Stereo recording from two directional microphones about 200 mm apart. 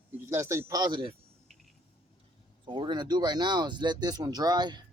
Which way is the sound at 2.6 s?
25° right (ahead or behind).